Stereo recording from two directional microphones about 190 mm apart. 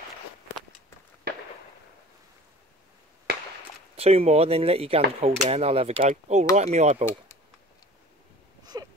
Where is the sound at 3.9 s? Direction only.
30° right (ahead or behind).